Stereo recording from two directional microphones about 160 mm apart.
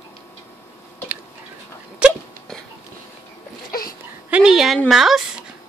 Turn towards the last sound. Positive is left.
turn(degrees=-5)  # may be behind; listen again after turning